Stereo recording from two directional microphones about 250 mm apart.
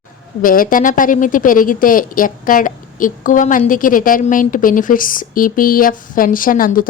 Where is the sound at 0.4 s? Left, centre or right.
Left.